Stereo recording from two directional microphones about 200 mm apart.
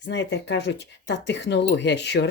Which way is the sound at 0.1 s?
60° left (ahead or behind).